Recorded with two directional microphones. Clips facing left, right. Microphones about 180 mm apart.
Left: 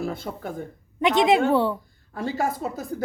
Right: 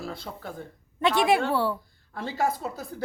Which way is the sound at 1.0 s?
20° left (ahead or behind).